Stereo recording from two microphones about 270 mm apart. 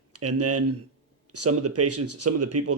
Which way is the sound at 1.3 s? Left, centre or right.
Right.